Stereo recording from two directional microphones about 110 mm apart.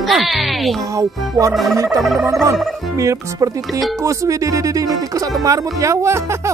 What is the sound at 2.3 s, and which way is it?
Speech, 30° right (ahead or behind).